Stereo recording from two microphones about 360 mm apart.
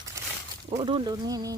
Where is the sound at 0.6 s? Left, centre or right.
Centre.